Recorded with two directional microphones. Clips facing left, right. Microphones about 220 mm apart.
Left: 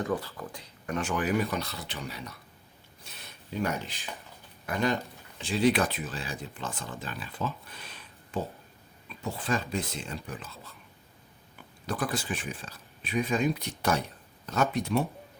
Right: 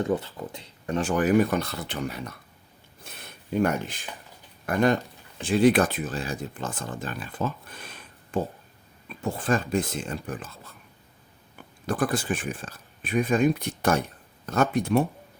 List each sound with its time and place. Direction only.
0.0 s speech: 25° right (ahead or behind)
1.1 s speech: 50° right (ahead or behind)
3.0 s a sound: 55° right (ahead or behind)
4.6 s speech: 50° right (ahead or behind)
11.9 s speech: 50° right (ahead or behind)